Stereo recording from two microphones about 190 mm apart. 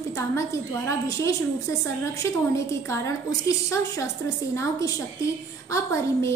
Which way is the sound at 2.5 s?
15° left (ahead or behind).